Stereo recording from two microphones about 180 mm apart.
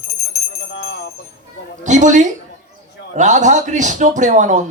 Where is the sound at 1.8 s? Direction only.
40° right (ahead or behind).